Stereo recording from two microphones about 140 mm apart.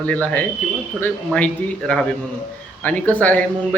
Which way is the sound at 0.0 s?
10° left (ahead or behind).